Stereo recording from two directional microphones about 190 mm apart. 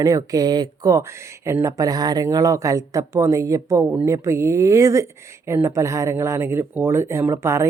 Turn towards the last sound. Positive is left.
turn(degrees=-15)  # may be behind; listen again after turning